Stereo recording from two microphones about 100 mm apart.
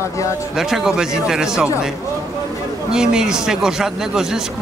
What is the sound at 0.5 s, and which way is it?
Speech, 5° right (ahead or behind).